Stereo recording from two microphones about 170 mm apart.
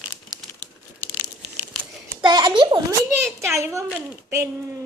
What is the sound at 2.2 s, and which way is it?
Speech, 25° right (ahead or behind).